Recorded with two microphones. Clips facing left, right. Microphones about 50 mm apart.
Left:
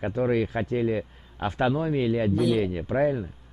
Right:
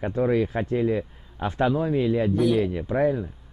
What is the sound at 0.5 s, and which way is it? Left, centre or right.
Speech, centre.